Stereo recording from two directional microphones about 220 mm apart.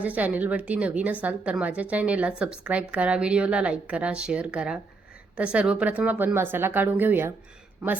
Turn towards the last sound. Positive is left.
turn(degrees=-5)  # may be behind; listen again after turning